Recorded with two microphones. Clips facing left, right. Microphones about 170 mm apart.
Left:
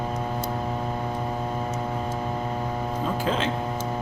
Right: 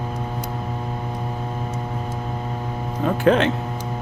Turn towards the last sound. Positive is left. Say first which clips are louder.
# right 8 dB
turn(degrees=-65)  # may be behind; listen again after turning